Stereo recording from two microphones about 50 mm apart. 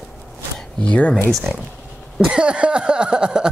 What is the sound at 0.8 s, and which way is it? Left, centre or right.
Speech, left.